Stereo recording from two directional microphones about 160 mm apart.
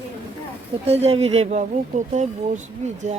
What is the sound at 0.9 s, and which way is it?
Speech, 40° right (ahead or behind).